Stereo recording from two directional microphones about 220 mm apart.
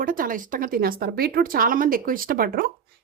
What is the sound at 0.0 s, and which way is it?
A woman's voice, 40° right (ahead or behind).